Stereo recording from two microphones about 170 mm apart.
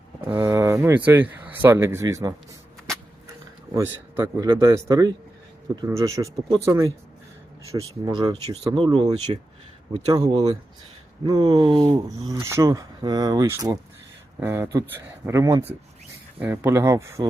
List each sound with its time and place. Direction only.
0.3 s speech: 15° right (ahead or behind)
3.8 s speech: 15° right (ahead or behind)
8.0 s speech: 25° right (ahead or behind)